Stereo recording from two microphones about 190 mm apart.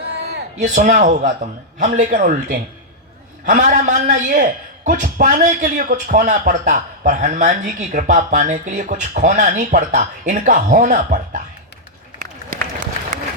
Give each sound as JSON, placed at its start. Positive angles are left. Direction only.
{"t": 0.6, "sound": "a man's voice", "side_deg": -40}